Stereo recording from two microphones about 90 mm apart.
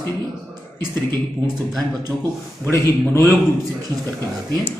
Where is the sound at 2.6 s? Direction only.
30° left (ahead or behind).